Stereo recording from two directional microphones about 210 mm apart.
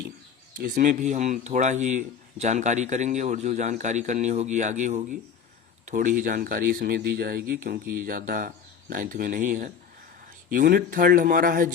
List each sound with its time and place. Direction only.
0.5 s speech: 40° right (ahead or behind)